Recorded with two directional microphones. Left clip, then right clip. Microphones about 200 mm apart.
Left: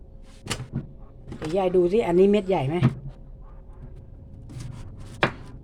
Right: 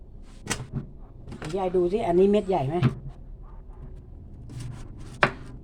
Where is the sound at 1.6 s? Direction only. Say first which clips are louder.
Left 4 dB; 40° left (ahead or behind); by 2.8 s 25° left (ahead or behind).